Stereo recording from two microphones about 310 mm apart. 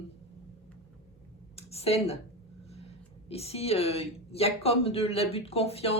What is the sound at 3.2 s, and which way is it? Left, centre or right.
Speech, centre.